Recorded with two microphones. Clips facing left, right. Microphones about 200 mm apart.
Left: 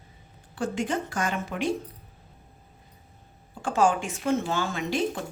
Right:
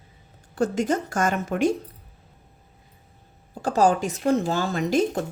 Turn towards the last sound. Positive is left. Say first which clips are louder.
# right 5 dB
turn(degrees=-40)  # may be behind; listen again after turning